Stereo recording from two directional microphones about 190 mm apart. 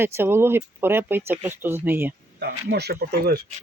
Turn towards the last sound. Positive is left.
turn(degrees=-55)  # may be behind; listen again after turning